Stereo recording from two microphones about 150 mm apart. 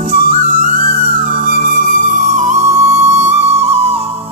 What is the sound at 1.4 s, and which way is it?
Music, 60° right (ahead or behind).